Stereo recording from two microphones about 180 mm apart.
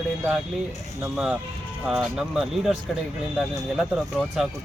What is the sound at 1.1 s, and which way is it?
Speech, 5° right (ahead or behind).